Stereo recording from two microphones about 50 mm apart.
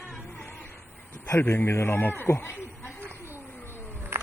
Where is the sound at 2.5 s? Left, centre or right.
Left.